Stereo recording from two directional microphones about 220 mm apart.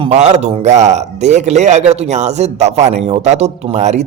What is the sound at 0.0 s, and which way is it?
A man's voice, 30° right (ahead or behind).